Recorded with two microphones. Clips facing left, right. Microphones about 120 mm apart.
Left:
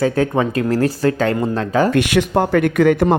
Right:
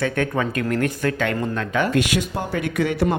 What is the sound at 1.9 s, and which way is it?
Speech, 60° left (ahead or behind).